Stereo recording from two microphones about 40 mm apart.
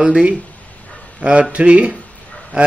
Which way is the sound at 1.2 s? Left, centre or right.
Right.